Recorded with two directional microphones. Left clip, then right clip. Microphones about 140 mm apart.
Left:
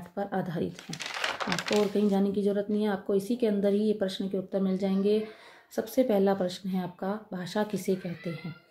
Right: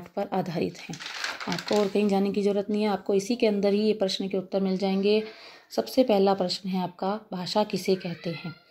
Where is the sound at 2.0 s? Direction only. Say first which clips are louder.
Right 3 dB; 30° right (ahead or behind).